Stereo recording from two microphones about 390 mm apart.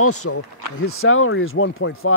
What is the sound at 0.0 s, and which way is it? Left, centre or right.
Speech, left.